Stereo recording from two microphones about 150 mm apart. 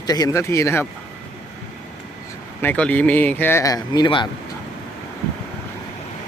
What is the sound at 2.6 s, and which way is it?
Speech, 10° left (ahead or behind).